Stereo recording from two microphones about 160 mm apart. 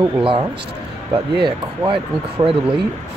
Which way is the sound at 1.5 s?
30° right (ahead or behind).